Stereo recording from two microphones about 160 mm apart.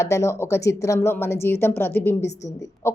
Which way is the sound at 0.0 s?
20° left (ahead or behind).